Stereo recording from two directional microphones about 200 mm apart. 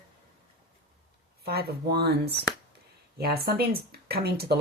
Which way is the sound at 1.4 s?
50° right (ahead or behind).